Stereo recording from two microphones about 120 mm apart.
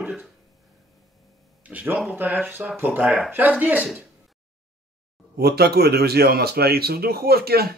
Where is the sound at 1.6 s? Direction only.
15° right (ahead or behind).